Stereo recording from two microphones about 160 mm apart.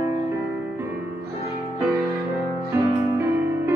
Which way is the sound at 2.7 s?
20° right (ahead or behind).